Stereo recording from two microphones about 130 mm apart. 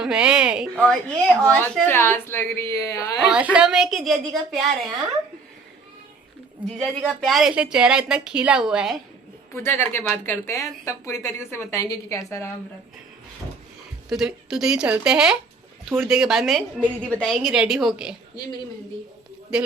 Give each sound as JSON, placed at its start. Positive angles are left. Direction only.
{"t": 0.0, "sound": "a woman's voice", "side_deg": -5}
{"t": 0.8, "sound": "a woman's voice", "side_deg": 10}
{"t": 3.2, "sound": "a woman's voice", "side_deg": -10}
{"t": 6.6, "sound": "a woman's voice", "side_deg": -10}
{"t": 7.2, "sound": "a woman's voice", "side_deg": 0}
{"t": 9.6, "sound": "speech", "side_deg": 15}
{"t": 14.1, "sound": "a woman's voice", "side_deg": -5}